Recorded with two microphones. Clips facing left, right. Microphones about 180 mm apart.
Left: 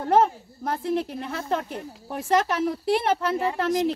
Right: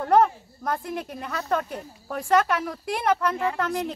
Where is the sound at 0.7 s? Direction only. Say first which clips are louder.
Left 4 dB; 30° left (ahead or behind).